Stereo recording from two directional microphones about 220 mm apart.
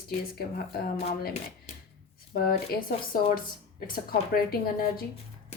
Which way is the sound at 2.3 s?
40° left (ahead or behind).